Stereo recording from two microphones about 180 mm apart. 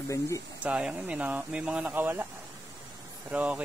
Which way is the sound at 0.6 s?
5° right (ahead or behind).